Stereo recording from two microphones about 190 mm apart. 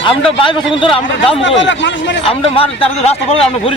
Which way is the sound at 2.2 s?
30° left (ahead or behind).